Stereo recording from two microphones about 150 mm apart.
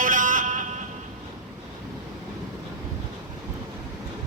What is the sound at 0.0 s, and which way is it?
Music, 60° right (ahead or behind).